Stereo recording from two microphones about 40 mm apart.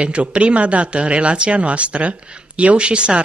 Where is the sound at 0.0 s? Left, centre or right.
Right.